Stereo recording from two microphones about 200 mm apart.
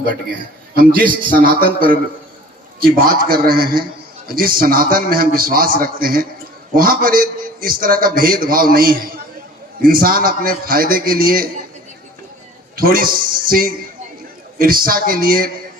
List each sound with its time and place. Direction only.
1.3 s a man's voice: 45° right (ahead or behind)
12.7 s a man's voice: 45° right (ahead or behind)